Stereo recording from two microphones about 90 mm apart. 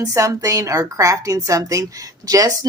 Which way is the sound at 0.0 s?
40° right (ahead or behind).